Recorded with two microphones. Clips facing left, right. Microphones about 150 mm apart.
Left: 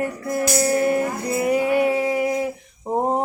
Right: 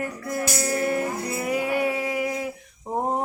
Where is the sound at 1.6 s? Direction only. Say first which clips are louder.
Left 6 dB; 25° left (ahead or behind).